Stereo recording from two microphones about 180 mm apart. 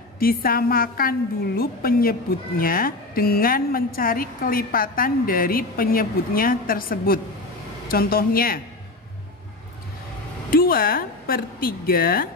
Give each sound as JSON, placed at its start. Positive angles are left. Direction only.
{"t": 0.2, "sound": "a woman's voice", "side_deg": 55}
{"t": 10.5, "sound": "a woman's voice", "side_deg": 55}